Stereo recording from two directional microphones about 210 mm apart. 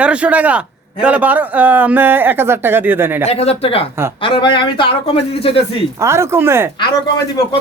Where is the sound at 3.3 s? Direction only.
30° left (ahead or behind).